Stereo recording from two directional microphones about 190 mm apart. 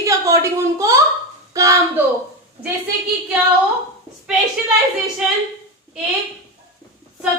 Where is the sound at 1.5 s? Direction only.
15° right (ahead or behind).